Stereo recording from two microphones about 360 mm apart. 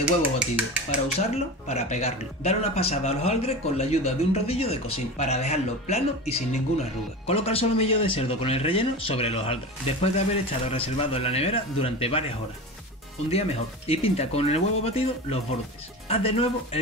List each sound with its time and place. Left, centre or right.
1.0 s speech: centre
13.3 s speech: centre